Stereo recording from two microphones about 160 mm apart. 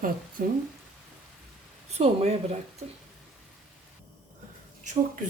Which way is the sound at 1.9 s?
40° right (ahead or behind).